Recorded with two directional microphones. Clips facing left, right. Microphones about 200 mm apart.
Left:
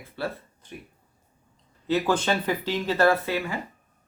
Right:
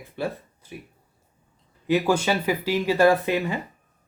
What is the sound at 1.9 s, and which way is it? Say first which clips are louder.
Speech: right 2 dB; 10° right (ahead or behind).